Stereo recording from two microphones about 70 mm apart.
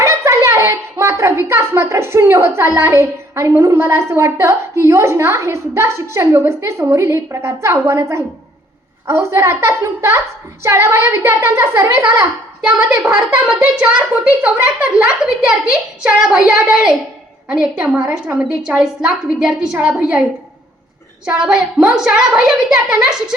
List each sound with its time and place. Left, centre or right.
0.0 s a child's voice: right
13.7 s a woman's voice: centre
21.2 s a woman's voice: centre